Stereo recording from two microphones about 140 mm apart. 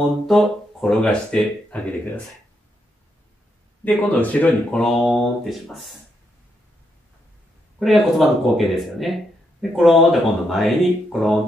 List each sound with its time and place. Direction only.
0.3 s speech: centre (ahead or behind)
3.8 s speech: 10° left (ahead or behind)
7.8 s speech: centre (ahead or behind)